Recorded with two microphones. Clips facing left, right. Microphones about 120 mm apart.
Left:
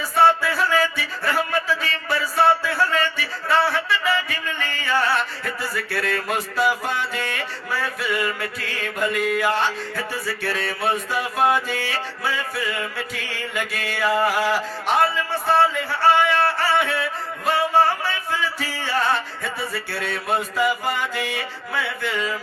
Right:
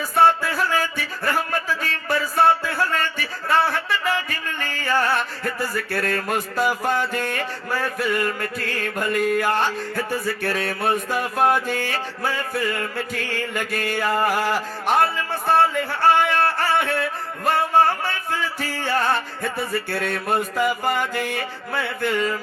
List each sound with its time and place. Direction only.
0.2 s music: 45° right (ahead or behind)